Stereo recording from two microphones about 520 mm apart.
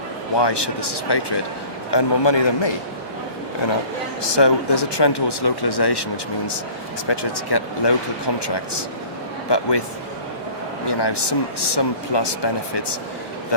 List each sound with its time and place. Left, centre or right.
0.3 s a man's voice: left
4.2 s speech: left
7.1 s speech: left
10.8 s speech: left